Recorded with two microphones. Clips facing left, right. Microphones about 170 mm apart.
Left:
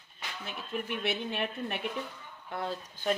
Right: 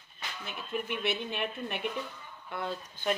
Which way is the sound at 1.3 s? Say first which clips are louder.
Left 1 dB; 40° left (ahead or behind).